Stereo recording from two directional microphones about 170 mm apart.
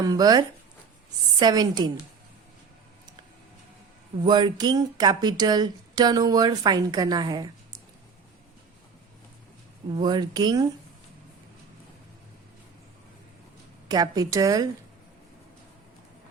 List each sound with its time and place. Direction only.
0.0 s speech: 20° right (ahead or behind)
4.2 s speech: 25° right (ahead or behind)
9.9 s speech: 25° right (ahead or behind)
13.8 s speech: 20° right (ahead or behind)